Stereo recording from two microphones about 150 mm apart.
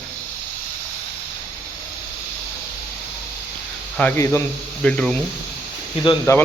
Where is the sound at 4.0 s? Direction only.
10° left (ahead or behind).